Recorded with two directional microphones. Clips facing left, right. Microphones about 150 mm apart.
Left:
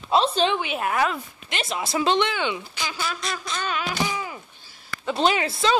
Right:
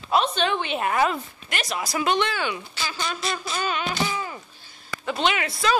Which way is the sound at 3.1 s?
Centre (ahead or behind).